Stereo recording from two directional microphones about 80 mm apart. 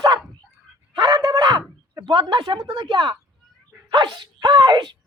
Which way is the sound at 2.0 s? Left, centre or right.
Right.